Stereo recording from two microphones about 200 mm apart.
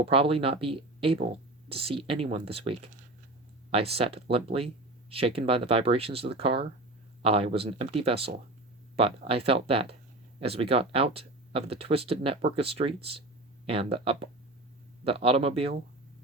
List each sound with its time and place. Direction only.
0.0 s speech: 30° right (ahead or behind)